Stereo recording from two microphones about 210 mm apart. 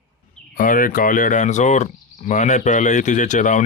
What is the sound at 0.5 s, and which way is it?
Speech, 40° left (ahead or behind).